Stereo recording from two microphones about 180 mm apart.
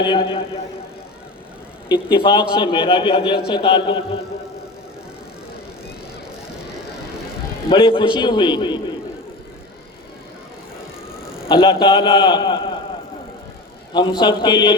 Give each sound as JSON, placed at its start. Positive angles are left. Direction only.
{"t": 0.0, "sound": "a man's voice", "side_deg": 25}
{"t": 2.1, "sound": "a man's voice", "side_deg": 25}
{"t": 7.7, "sound": "a man's voice", "side_deg": 30}
{"t": 11.4, "sound": "a man's voice", "side_deg": 30}
{"t": 13.9, "sound": "a man's voice", "side_deg": 25}